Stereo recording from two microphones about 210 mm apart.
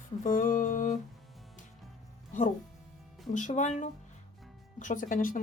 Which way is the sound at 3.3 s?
35° left (ahead or behind).